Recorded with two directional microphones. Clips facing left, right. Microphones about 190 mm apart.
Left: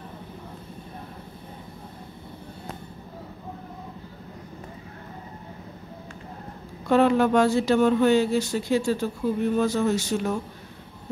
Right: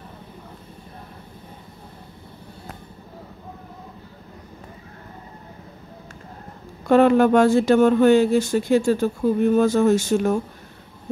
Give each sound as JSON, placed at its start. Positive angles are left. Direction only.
{"t": 6.9, "sound": "speech", "side_deg": -50}